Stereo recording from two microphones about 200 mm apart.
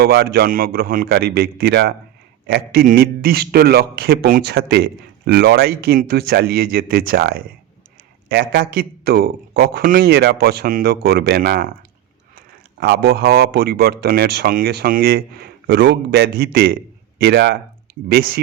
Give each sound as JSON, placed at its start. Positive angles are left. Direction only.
{"t": 0.0, "sound": "a man's voice", "side_deg": -50}
{"t": 12.8, "sound": "a man's voice", "side_deg": -50}
{"t": 15.6, "sound": "a man's voice", "side_deg": -60}